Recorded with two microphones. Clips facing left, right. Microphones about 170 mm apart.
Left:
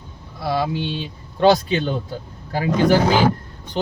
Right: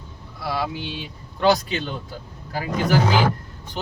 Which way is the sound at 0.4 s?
25° left (ahead or behind).